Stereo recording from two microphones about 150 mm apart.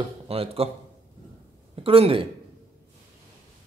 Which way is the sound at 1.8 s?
40° right (ahead or behind).